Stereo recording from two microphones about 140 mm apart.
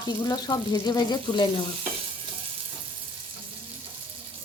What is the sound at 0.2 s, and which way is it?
Speech, 25° left (ahead or behind).